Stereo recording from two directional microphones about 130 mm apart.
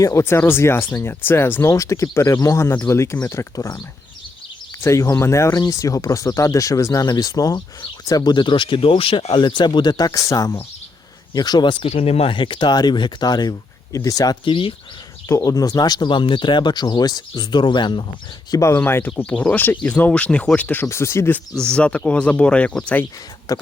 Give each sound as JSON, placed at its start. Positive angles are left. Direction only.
{"t": 0.0, "sound": "speech", "side_deg": 20}
{"t": 4.8, "sound": "speech", "side_deg": 25}
{"t": 14.4, "sound": "speech", "side_deg": 40}
{"t": 15.3, "sound": "speech", "side_deg": 25}
{"t": 18.5, "sound": "speech", "side_deg": 20}
{"t": 21.5, "sound": "speech", "side_deg": 5}
{"t": 23.5, "sound": "speech", "side_deg": 30}